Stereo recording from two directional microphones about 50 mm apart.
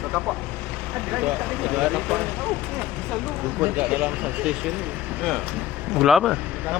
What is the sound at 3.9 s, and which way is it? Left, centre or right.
Speech, right.